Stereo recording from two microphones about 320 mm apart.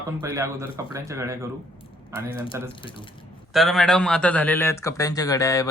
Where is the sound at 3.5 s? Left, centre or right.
Centre.